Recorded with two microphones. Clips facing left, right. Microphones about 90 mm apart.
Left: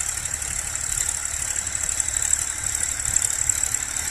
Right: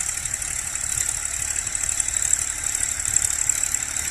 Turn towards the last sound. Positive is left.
turn(degrees=10)  # may be behind; listen again after turning